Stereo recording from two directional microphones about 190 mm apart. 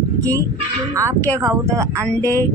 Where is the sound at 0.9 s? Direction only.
15° right (ahead or behind).